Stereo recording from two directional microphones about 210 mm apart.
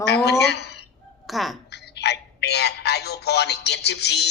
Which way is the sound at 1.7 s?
55° left (ahead or behind).